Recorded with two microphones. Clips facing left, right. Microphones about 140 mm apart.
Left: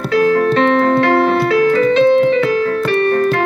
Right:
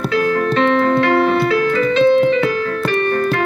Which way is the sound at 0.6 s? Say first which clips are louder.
Left 2 dB; 55° left (ahead or behind).